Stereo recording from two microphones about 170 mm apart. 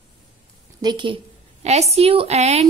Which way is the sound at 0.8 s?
30° right (ahead or behind).